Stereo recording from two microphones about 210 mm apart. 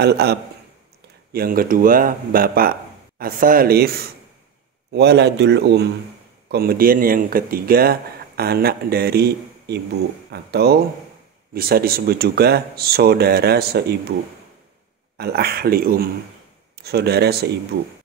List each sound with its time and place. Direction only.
0.0 s speech: 50° right (ahead or behind)
15.1 s speech: 50° right (ahead or behind)